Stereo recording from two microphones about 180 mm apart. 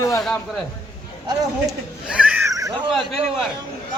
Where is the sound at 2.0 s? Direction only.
5° right (ahead or behind).